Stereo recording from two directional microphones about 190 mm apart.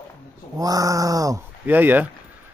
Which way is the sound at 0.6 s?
20° right (ahead or behind).